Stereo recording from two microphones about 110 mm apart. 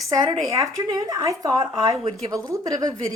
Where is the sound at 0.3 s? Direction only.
30° right (ahead or behind).